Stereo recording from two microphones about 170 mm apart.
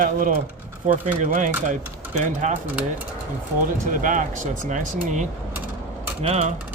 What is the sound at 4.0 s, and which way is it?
Speech, 50° right (ahead or behind).